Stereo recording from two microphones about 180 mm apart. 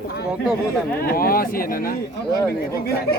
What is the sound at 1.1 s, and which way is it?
Speech, 55° left (ahead or behind).